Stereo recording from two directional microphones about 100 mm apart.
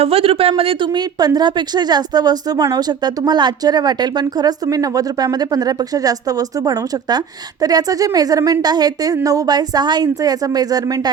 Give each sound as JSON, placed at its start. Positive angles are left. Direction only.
{"t": 0.0, "sound": "a man's voice", "side_deg": -75}
{"t": 0.9, "sound": "speech", "side_deg": -40}